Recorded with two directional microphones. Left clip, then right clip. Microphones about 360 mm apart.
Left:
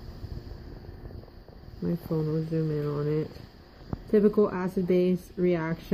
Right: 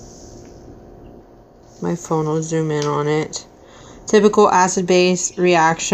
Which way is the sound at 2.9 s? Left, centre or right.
Centre.